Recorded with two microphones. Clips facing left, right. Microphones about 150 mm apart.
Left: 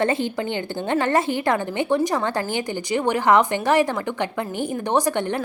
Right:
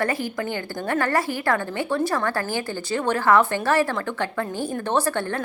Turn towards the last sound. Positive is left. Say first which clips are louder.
# left 2 dB
turn(degrees=15)  # may be behind; listen again after turning